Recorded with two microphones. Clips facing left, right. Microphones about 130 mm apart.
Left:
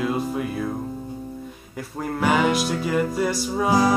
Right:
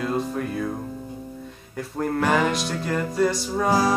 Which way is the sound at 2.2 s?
5° left (ahead or behind).